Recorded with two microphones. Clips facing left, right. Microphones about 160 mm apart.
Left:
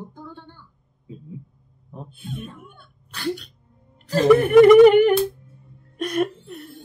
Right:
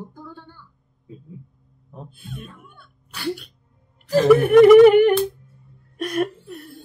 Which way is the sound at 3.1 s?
10° right (ahead or behind).